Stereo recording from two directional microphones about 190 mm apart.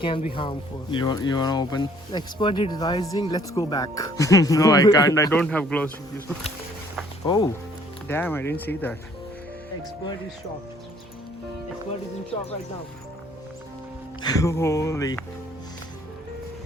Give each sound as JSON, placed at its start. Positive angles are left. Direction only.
{"t": 0.0, "sound": "speech", "side_deg": 30}
{"t": 5.4, "sound": "speech", "side_deg": 5}
{"t": 7.3, "sound": "speech", "side_deg": 20}
{"t": 14.2, "sound": "speech", "side_deg": 20}